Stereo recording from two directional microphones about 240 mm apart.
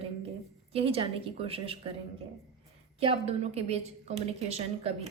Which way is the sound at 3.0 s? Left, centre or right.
Right.